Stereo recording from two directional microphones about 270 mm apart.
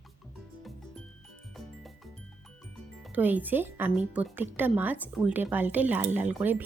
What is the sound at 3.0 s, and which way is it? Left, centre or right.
Speech, centre.